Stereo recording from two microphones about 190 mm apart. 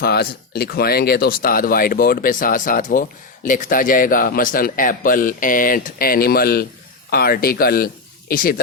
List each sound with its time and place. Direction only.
0.0 s speech: 55° left (ahead or behind)